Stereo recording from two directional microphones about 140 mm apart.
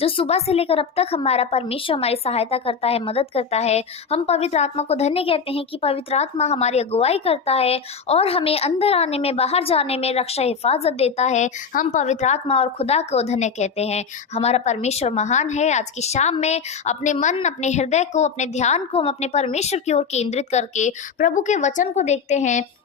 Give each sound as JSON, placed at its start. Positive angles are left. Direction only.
{"t": 0.0, "sound": "a woman's voice", "side_deg": 45}